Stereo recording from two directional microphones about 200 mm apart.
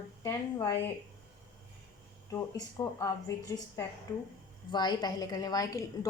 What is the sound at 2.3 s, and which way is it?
Speech, 15° left (ahead or behind).